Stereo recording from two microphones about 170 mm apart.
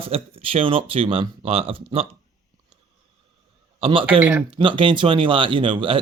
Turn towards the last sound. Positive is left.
turn(degrees=-30)  # may be behind; listen again after turning